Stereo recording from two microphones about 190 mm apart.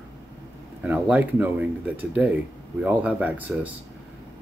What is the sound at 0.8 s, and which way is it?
Speech, 10° right (ahead or behind).